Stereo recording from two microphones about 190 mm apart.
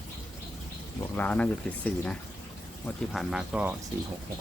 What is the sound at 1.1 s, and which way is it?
Speech, 5° left (ahead or behind).